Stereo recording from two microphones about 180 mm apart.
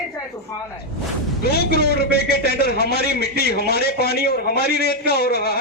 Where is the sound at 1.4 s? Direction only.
60° left (ahead or behind).